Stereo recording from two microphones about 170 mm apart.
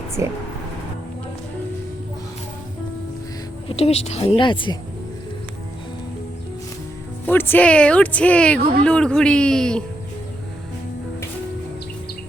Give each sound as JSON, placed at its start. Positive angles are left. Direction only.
{"t": 0.2, "sound": "speech", "side_deg": -15}
{"t": 3.7, "sound": "a woman's voice", "side_deg": 35}
{"t": 7.3, "sound": "speech", "side_deg": 10}